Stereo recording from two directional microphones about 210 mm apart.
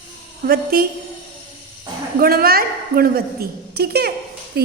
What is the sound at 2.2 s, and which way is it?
A woman's voice, 45° right (ahead or behind).